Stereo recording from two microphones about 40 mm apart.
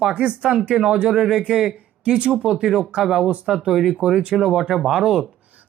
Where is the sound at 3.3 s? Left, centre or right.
Right.